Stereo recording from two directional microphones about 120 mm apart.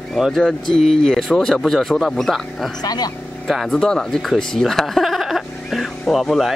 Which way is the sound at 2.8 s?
35° left (ahead or behind).